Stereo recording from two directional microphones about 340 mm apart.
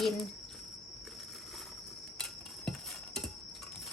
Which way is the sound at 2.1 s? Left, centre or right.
Centre.